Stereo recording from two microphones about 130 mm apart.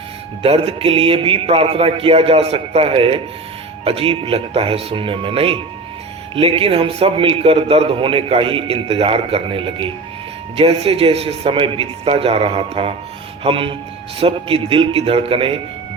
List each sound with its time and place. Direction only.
0.4 s a man's voice: 50° right (ahead or behind)